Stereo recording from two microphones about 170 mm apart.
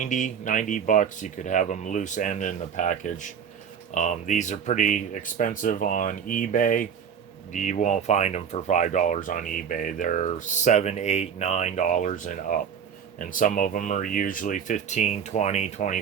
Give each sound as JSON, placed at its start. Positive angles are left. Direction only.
{"t": 0.0, "sound": "speech", "side_deg": 45}